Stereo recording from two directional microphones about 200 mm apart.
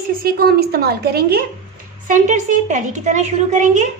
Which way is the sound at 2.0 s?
40° right (ahead or behind).